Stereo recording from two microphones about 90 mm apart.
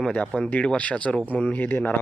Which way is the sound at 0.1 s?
15° left (ahead or behind).